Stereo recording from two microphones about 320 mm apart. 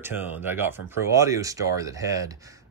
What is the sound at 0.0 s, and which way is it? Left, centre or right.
Speech, centre.